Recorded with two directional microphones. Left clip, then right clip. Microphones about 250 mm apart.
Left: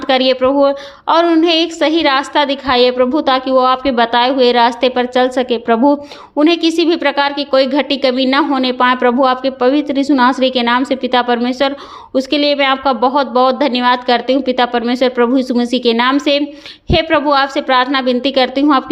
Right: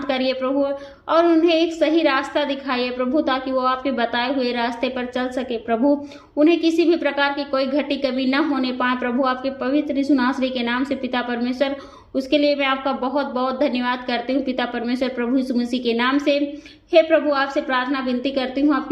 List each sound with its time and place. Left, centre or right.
0.1 s a woman's voice: left